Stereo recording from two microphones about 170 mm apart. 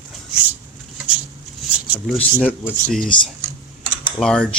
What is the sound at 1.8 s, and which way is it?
Speech, 10° right (ahead or behind).